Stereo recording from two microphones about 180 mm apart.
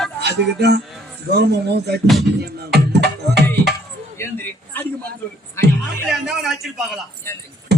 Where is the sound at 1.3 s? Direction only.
65° right (ahead or behind).